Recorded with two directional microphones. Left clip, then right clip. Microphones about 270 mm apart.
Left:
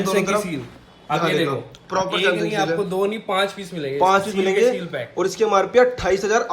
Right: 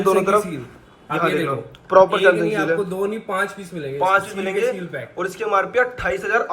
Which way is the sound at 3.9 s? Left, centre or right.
Left.